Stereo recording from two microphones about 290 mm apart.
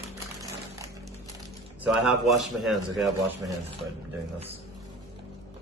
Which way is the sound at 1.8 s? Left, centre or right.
Centre.